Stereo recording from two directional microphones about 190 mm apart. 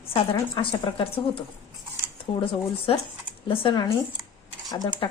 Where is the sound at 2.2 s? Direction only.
30° left (ahead or behind).